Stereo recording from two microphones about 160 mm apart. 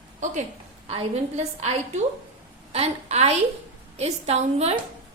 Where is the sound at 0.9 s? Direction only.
40° right (ahead or behind).